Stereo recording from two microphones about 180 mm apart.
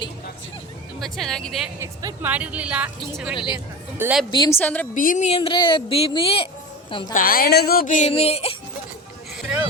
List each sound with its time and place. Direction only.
0.9 s speech: centre (ahead or behind)
1.8 s a woman's voice: 20° right (ahead or behind)
2.3 s a woman's voice: 5° right (ahead or behind)
3.3 s speech: 25° left (ahead or behind)
3.9 s a woman's voice: 10° right (ahead or behind)
4.3 s speech: 25° left (ahead or behind)
4.5 s a woman's voice: 10° left (ahead or behind)
4.9 s a woman's voice: 45° left (ahead or behind)
7.1 s speech: 55° left (ahead or behind)
8.1 s a woman's voice: 35° left (ahead or behind)